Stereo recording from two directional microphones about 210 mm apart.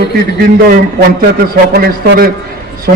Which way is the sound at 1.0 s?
45° right (ahead or behind).